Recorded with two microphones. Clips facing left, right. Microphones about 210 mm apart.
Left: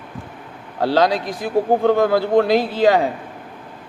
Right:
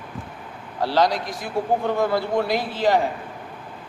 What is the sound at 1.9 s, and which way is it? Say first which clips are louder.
A man's voice: left 6 dB; 70° left (ahead or behind).